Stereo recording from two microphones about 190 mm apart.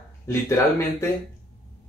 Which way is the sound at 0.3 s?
15° left (ahead or behind).